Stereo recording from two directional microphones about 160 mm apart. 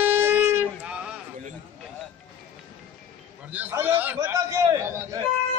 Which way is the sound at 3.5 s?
10° right (ahead or behind).